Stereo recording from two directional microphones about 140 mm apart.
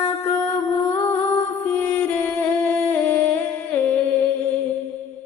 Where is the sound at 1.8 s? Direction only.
15° left (ahead or behind).